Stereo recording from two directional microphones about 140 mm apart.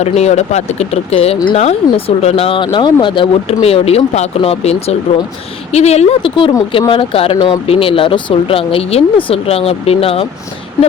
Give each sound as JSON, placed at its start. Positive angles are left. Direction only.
{"t": 0.0, "sound": "speech", "side_deg": 50}
{"t": 7.3, "sound": "speech", "side_deg": 25}
{"t": 7.7, "sound": "speech", "side_deg": 40}